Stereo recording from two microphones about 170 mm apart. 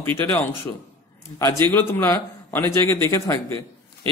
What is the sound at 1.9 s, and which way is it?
A man's voice, 15° left (ahead or behind).